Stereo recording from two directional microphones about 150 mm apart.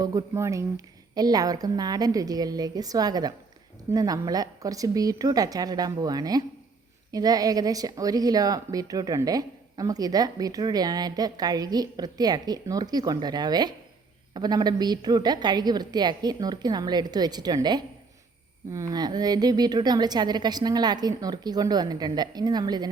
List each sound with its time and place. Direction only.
0.0 s a woman's voice: 25° right (ahead or behind)